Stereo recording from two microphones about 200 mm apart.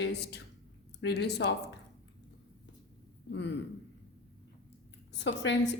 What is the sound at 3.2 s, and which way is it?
Speech, 60° left (ahead or behind).